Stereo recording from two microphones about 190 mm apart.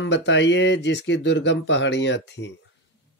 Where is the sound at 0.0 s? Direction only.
70° left (ahead or behind).